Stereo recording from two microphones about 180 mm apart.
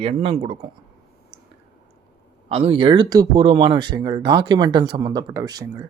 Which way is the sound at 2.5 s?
30° right (ahead or behind).